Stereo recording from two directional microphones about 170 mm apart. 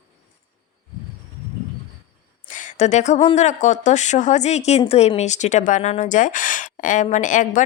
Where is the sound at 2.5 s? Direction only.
45° left (ahead or behind).